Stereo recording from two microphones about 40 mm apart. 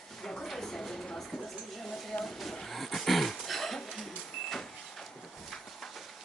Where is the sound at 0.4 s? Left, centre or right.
Centre.